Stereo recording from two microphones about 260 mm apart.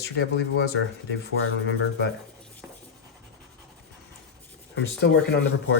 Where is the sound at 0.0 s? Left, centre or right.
Left.